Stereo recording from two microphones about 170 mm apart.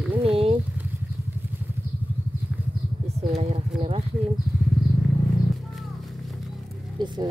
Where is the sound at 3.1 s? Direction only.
35° right (ahead or behind).